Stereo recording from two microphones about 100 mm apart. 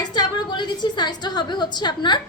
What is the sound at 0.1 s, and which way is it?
A woman's voice, 45° left (ahead or behind).